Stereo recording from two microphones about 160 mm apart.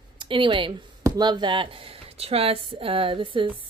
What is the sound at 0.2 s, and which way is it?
Speech, 30° right (ahead or behind).